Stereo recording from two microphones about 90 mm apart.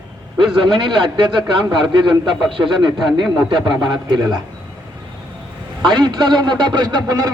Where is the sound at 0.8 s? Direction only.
60° right (ahead or behind).